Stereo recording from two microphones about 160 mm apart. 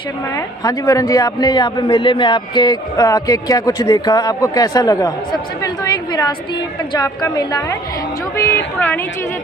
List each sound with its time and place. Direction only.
0.3 s a man's voice: 20° left (ahead or behind)